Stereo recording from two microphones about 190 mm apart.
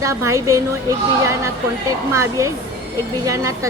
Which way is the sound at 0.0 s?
15° right (ahead or behind).